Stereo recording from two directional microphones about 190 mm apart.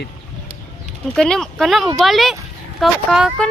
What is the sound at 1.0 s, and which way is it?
Speech, 5° left (ahead or behind).